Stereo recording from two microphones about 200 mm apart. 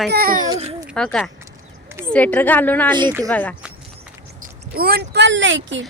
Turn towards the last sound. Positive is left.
turn(degrees=-65)  # may be behind; listen again after turning